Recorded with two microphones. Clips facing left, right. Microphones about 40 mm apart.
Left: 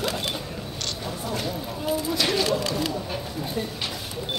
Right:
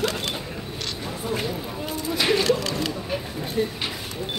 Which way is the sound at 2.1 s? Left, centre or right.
Centre.